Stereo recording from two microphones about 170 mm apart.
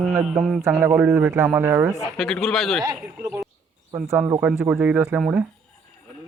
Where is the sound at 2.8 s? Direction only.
15° right (ahead or behind).